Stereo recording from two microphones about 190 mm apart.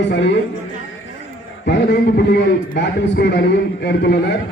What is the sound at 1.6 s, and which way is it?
A man's voice, 60° left (ahead or behind).